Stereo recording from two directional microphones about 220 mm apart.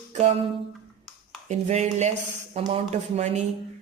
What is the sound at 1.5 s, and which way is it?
A man's voice, 30° right (ahead or behind).